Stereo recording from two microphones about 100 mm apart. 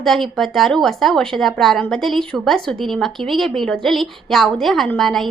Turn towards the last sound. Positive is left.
turn(degrees=5)  # may be behind; listen again after turning